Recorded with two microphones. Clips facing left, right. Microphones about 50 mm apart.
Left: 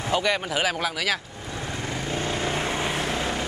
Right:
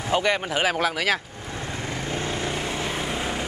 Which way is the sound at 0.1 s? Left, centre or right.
Right.